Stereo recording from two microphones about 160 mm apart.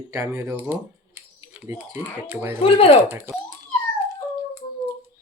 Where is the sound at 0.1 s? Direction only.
20° right (ahead or behind).